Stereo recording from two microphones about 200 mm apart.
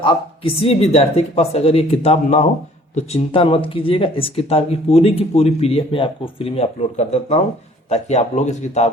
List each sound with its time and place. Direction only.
0.0 s speech: 25° left (ahead or behind)